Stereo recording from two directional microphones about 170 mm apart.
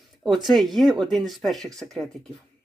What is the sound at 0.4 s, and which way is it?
Speech, centre (ahead or behind).